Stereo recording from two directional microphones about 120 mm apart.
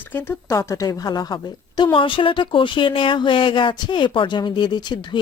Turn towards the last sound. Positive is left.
turn(degrees=40)  # may be behind; listen again after turning